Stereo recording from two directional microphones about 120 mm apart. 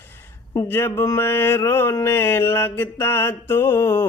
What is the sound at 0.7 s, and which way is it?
Mantra, 20° left (ahead or behind).